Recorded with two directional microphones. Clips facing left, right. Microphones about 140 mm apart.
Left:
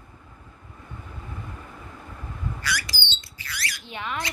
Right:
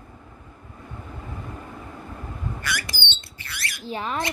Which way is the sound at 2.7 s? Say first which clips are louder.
Right 1 dB; 55° right (ahead or behind).